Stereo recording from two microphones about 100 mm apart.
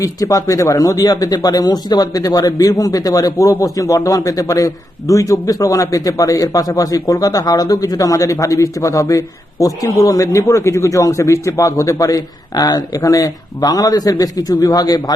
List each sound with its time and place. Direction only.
0.0 s speech: 35° left (ahead or behind)